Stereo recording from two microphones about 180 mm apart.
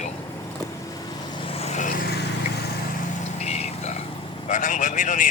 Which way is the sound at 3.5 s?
40° left (ahead or behind).